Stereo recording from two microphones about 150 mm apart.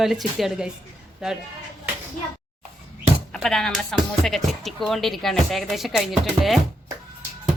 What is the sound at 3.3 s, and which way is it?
A woman's voice, 5° left (ahead or behind).